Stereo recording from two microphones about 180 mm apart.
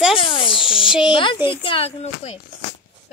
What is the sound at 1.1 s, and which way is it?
Speech, 25° left (ahead or behind).